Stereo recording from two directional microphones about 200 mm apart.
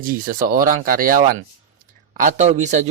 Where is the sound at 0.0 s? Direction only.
45° right (ahead or behind).